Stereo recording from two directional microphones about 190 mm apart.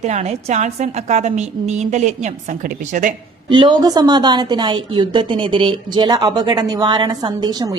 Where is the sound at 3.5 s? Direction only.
25° right (ahead or behind).